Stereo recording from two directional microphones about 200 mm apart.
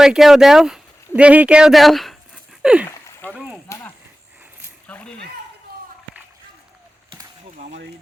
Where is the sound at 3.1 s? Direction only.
10° left (ahead or behind).